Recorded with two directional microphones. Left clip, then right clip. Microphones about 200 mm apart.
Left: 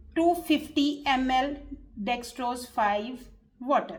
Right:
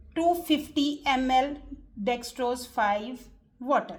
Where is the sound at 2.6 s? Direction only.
15° right (ahead or behind).